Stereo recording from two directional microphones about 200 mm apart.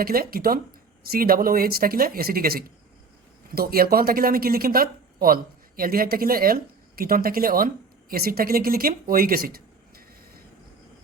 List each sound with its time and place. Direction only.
0.0 s speech: 45° right (ahead or behind)